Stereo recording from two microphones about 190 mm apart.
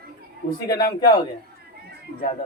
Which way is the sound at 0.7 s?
20° left (ahead or behind).